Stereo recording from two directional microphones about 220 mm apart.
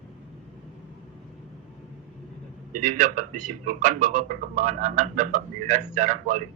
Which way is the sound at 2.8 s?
35° right (ahead or behind).